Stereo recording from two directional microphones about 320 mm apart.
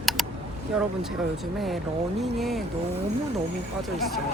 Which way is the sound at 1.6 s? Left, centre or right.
Centre.